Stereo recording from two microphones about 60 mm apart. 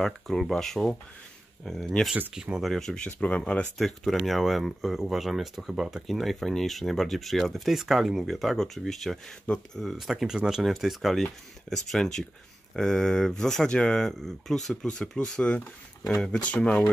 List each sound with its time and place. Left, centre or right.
0.0 s speech: centre
2.3 s speech: centre
2.6 s speech: centre
3.1 s speech: left
3.7 s speech: centre